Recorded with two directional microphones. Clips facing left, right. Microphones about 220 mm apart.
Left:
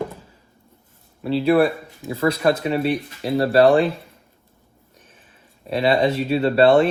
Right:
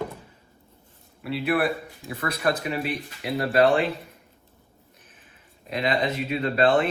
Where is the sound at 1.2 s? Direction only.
30° left (ahead or behind).